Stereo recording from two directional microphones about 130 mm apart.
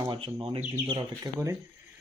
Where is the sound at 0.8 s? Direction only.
35° right (ahead or behind).